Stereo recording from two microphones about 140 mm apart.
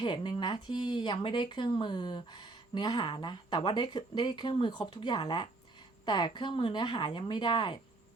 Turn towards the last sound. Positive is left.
turn(degrees=35)  # may be behind; listen again after turning